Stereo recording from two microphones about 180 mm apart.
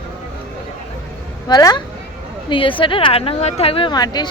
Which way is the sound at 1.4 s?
25° left (ahead or behind).